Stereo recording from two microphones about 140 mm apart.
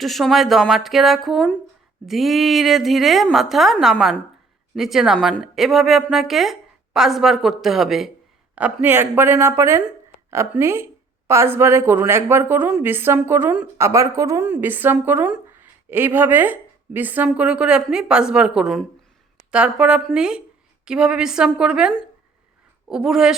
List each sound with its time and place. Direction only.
0.0 s a woman's voice: centre (ahead or behind)